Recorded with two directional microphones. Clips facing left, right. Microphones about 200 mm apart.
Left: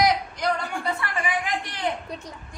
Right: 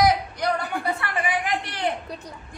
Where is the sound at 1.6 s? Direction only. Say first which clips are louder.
Right 2 dB; 55° right (ahead or behind).